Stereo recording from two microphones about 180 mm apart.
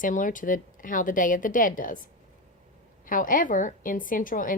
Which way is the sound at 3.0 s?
50° left (ahead or behind).